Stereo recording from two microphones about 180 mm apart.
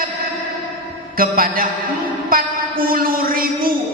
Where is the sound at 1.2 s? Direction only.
55° right (ahead or behind).